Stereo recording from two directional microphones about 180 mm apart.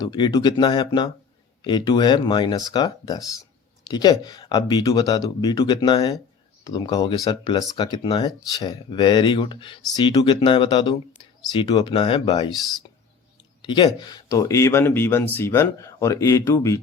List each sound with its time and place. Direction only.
0.0 s speech: 20° left (ahead or behind)
13.6 s speech: 25° left (ahead or behind)